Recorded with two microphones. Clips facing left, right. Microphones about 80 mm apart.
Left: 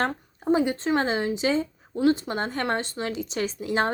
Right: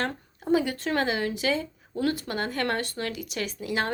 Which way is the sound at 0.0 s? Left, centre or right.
Left.